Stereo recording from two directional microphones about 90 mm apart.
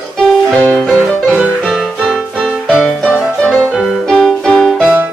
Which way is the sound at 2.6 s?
10° left (ahead or behind).